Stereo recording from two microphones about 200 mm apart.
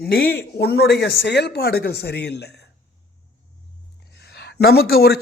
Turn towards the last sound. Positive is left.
turn(degrees=50)  # may be behind; listen again after turning